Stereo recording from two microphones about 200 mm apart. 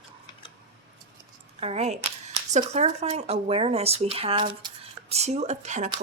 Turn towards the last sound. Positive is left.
turn(degrees=-35)  # may be behind; listen again after turning